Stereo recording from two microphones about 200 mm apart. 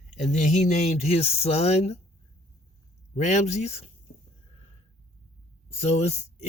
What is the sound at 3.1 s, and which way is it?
Speech, 35° left (ahead or behind).